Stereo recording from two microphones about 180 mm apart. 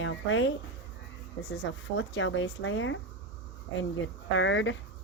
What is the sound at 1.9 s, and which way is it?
A woman's voice, 90° left.